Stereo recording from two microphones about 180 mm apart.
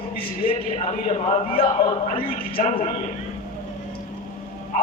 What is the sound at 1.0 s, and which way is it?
A man's voice, 35° left (ahead or behind).